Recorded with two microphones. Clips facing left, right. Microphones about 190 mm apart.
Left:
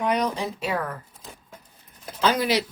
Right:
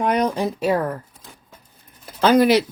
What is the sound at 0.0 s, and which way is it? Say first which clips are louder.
Speech: right 5 dB; 55° right (ahead or behind).